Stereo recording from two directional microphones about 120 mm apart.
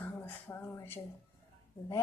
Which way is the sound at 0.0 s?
15° left (ahead or behind).